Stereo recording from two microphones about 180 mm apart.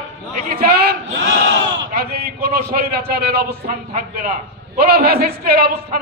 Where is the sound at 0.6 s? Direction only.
60° right (ahead or behind).